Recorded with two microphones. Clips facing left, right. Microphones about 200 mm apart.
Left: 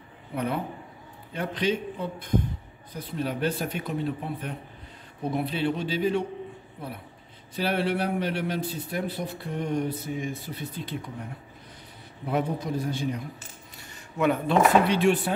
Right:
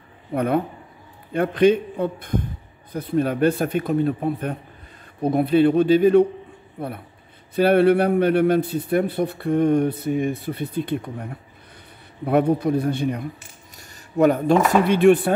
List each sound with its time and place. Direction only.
0.3 s a man's voice: 55° right (ahead or behind)
12.3 s a man's voice: 60° right (ahead or behind)
13.7 s speech: 40° right (ahead or behind)